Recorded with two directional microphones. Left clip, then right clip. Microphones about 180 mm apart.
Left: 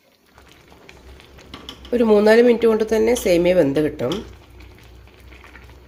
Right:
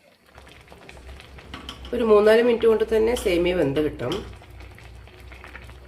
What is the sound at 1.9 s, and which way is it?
Speech, 30° left (ahead or behind).